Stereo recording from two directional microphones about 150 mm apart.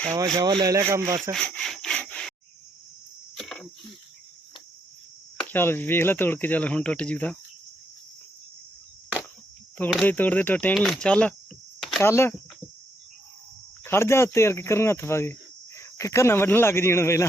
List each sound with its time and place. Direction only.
0.3 s speech: 25° right (ahead or behind)
1.3 s rub: 5° left (ahead or behind)
3.3 s cricket: centre (ahead or behind)
5.4 s speech: 15° left (ahead or behind)
10.0 s speech: 10° left (ahead or behind)
11.8 s cricket: centre (ahead or behind)
12.0 s speech: 15° left (ahead or behind)
13.8 s speech: 15° left (ahead or behind)